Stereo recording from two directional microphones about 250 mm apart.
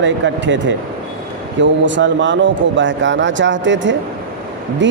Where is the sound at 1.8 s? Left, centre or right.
Right.